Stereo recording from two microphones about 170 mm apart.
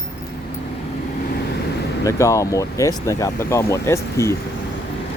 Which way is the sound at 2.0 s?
20° left (ahead or behind).